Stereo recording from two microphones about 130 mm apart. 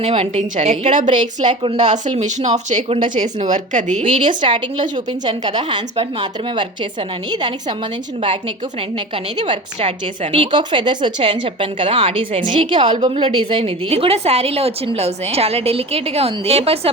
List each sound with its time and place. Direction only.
0.0 s a woman's voice: 50° right (ahead or behind)
0.9 s a woman's voice: 70° right (ahead or behind)
4.1 s a woman's voice: 40° right (ahead or behind)
10.3 s a woman's voice: 40° right (ahead or behind)